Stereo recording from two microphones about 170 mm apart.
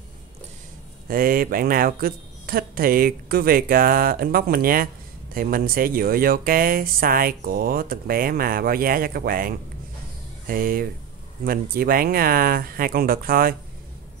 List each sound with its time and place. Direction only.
1.0 s speech: 55° right (ahead or behind)